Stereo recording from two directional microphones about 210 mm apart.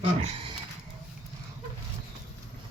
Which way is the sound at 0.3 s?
25° right (ahead or behind).